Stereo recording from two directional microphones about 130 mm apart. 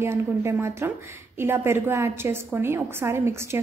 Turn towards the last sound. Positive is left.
turn(degrees=-20)  # may be behind; listen again after turning